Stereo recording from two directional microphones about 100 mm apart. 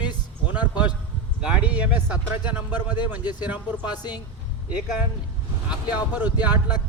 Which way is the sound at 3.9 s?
45° left (ahead or behind).